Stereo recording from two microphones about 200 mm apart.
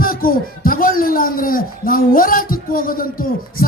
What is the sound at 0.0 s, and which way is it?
A man's voice, 45° left (ahead or behind).